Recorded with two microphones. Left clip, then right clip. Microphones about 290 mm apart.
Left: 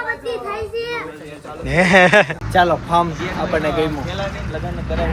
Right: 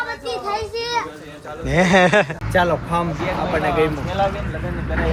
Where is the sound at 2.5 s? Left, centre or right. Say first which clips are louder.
Left 3 dB; centre.